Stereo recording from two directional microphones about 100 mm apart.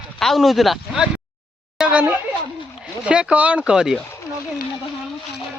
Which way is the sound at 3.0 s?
10° right (ahead or behind).